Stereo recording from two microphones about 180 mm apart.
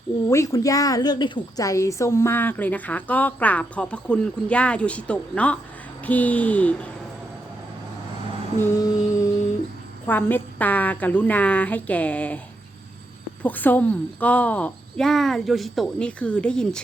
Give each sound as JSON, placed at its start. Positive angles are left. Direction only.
{"t": 0.3, "sound": "a woman's voice", "side_deg": 15}
{"t": 8.6, "sound": "a sound", "side_deg": 15}
{"t": 10.1, "sound": "a woman's voice", "side_deg": 10}
{"t": 13.4, "sound": "speech", "side_deg": 10}